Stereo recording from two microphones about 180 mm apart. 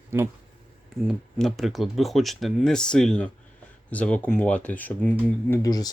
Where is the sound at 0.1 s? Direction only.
15° right (ahead or behind).